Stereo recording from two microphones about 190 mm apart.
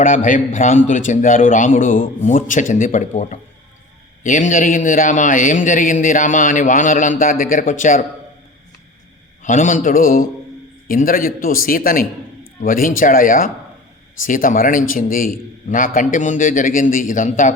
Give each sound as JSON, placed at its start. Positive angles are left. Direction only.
{"t": 0.0, "sound": "a man's voice", "side_deg": 45}
{"t": 9.4, "sound": "a man's voice", "side_deg": 40}